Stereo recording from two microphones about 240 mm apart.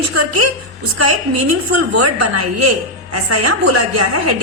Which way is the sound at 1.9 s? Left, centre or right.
Right.